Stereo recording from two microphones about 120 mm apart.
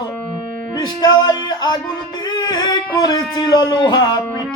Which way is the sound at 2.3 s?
35° left (ahead or behind).